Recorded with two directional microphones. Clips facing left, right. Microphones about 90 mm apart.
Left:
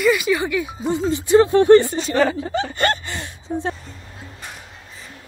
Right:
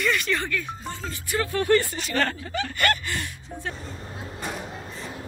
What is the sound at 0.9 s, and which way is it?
Speech, 20° left (ahead or behind).